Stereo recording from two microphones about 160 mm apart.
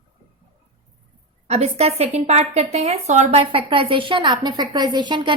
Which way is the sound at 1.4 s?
45° right (ahead or behind).